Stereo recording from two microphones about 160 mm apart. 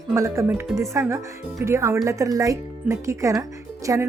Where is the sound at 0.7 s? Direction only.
15° right (ahead or behind).